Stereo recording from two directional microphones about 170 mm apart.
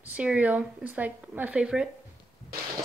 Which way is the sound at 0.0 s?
10° right (ahead or behind).